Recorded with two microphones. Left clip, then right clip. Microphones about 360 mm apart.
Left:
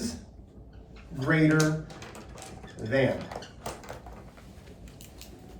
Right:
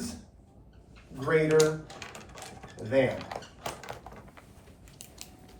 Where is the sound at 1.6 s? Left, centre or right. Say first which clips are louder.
Right 4 dB; right.